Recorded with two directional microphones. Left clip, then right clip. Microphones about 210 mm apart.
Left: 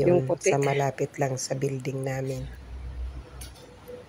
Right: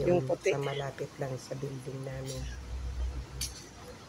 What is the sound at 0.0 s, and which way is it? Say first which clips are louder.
Speech: left 6 dB; 20° left (ahead or behind).